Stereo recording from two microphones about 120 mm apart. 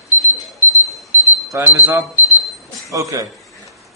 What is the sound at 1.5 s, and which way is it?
A man's voice, 20° right (ahead or behind).